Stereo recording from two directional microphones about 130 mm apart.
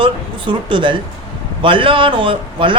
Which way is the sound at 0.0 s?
40° right (ahead or behind).